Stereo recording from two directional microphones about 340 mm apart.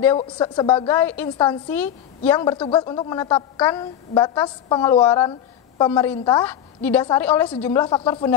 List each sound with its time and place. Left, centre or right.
0.0 s a woman's voice: centre